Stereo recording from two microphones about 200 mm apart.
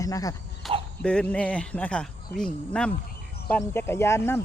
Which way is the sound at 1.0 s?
5° left (ahead or behind).